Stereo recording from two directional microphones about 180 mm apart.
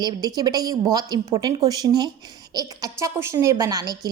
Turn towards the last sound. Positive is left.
turn(degrees=-20)  # may be behind; listen again after turning